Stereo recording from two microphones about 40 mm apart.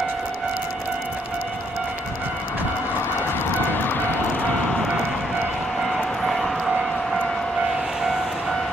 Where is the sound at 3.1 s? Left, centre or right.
Left.